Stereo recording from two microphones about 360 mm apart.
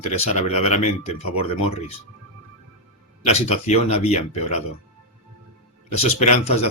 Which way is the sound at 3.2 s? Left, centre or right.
Centre.